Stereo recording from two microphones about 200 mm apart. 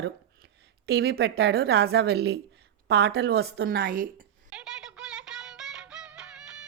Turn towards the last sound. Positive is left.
turn(degrees=-5)  # may be behind; listen again after turning